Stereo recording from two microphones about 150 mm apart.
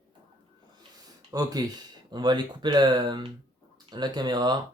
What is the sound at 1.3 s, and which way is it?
Speech, 25° right (ahead or behind).